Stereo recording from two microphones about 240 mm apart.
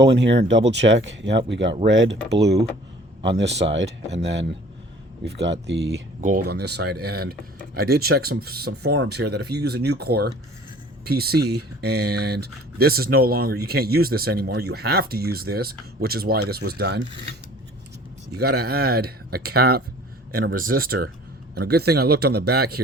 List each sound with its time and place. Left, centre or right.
0.0 s speech: right
18.3 s speech: right